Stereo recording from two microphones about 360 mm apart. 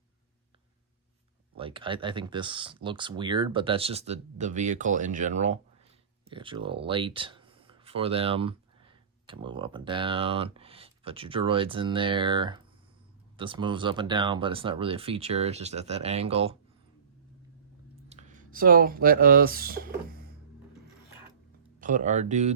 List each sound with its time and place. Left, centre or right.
1.5 s speech: centre
18.1 s speech: centre
21.8 s speech: right